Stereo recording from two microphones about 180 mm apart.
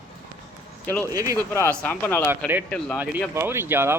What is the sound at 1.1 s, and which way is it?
Speech, 20° right (ahead or behind).